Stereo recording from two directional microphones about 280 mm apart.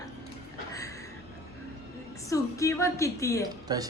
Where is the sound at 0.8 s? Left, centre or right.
Centre.